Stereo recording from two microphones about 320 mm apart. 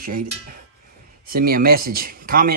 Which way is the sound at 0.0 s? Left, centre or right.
Right.